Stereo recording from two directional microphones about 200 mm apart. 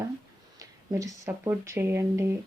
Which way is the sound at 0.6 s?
15° right (ahead or behind).